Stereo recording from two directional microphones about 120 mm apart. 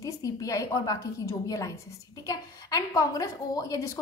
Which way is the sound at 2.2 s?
30° left (ahead or behind).